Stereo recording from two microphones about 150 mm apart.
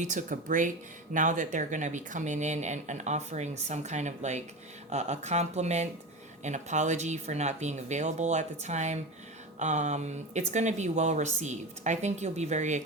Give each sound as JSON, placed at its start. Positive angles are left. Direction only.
{"t": 0.0, "sound": "speech", "side_deg": -60}